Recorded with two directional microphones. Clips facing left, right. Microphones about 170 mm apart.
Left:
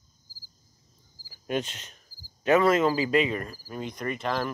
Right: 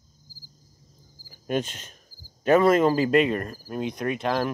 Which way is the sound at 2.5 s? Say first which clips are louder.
Right 3 dB; 45° right (ahead or behind).